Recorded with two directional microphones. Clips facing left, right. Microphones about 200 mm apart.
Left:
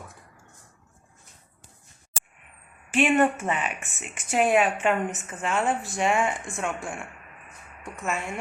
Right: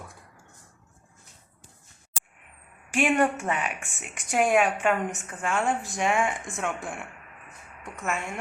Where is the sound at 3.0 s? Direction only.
5° left (ahead or behind).